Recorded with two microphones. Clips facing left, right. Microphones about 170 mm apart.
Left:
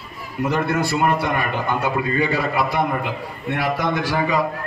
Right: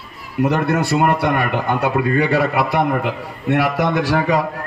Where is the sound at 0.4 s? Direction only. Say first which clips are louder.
Right 4 dB; 75° right (ahead or behind).